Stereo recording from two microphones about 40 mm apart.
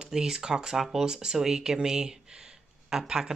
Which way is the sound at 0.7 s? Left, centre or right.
Centre.